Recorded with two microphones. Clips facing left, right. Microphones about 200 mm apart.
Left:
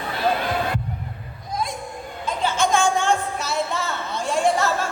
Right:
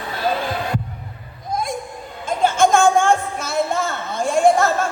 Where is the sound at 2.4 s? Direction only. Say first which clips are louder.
Right 6 dB; 50° right (ahead or behind).